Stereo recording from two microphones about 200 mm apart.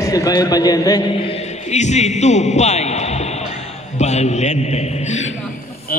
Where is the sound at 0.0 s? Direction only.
15° left (ahead or behind).